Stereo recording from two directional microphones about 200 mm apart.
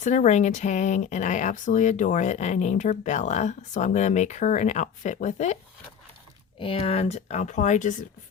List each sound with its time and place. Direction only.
0.0 s speech: 35° left (ahead or behind)
6.6 s speech: 30° left (ahead or behind)